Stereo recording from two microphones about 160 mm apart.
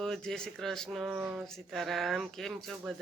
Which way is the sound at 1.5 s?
Centre (ahead or behind).